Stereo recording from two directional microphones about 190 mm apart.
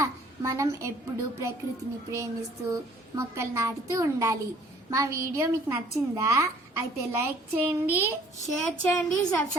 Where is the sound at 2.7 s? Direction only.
15° right (ahead or behind).